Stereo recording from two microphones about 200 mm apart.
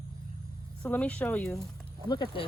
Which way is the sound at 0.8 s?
5° left (ahead or behind).